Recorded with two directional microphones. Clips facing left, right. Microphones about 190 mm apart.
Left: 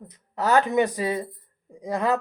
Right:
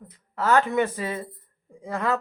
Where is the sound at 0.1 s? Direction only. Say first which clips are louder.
Even; 15° left (ahead or behind).